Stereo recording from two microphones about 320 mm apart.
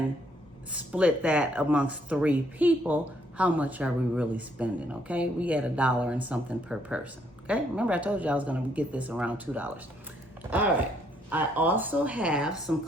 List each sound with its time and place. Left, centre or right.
0.7 s speech: centre
11.3 s speech: centre